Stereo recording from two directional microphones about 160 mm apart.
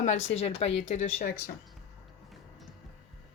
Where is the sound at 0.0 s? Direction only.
45° left (ahead or behind).